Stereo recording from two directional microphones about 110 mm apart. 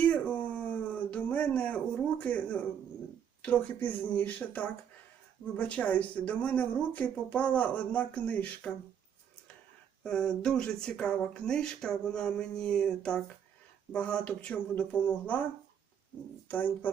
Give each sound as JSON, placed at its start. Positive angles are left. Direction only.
{"t": 0.0, "sound": "dog", "side_deg": 10}
{"t": 1.1, "sound": "speech", "side_deg": 10}
{"t": 10.0, "sound": "speech", "side_deg": 5}
{"t": 16.5, "sound": "speech", "side_deg": 15}